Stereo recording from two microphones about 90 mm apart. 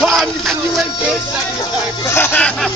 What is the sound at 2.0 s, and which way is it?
Speech, 25° left (ahead or behind).